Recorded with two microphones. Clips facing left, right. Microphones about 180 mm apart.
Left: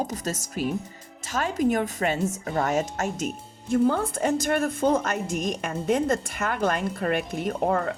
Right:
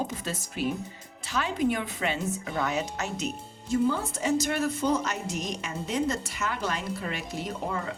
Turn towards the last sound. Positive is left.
turn(degrees=55)  # may be behind; listen again after turning